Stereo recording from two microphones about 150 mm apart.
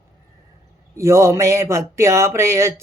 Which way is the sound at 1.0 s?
20° right (ahead or behind).